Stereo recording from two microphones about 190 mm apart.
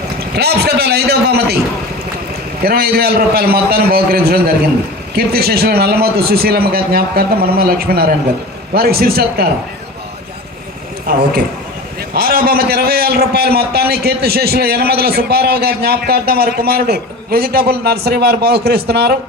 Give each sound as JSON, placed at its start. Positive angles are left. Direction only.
{"t": 0.3, "sound": "a sound", "side_deg": -55}
{"t": 2.6, "sound": "a man's voice", "side_deg": -50}
{"t": 11.2, "sound": "a man's voice", "side_deg": -55}